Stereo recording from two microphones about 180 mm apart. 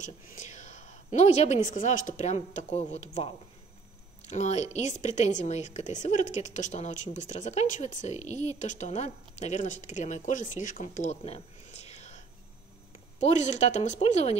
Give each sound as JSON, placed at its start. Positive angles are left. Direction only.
{"t": 0.0, "sound": "a woman's voice", "side_deg": 45}
{"t": 13.2, "sound": "a woman's voice", "side_deg": 40}